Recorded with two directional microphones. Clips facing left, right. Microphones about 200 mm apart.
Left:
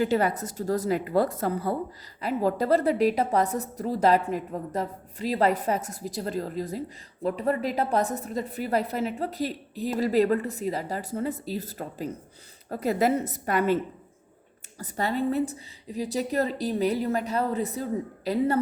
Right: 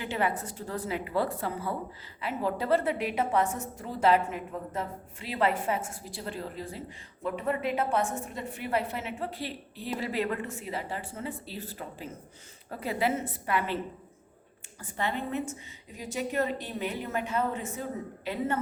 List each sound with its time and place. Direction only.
0.0 s a woman's voice: 40° left (ahead or behind)
14.8 s a woman's voice: 40° left (ahead or behind)